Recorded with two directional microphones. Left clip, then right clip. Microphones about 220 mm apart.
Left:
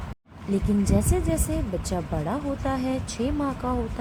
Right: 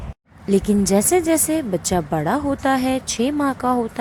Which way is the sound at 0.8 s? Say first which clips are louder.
Right 9 dB; 40° right (ahead or behind).